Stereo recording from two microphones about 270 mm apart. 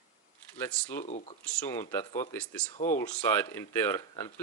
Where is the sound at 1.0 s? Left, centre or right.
Left.